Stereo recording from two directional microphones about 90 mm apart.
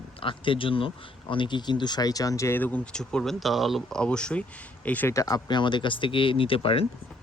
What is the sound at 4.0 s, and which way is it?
Speech, 10° left (ahead or behind).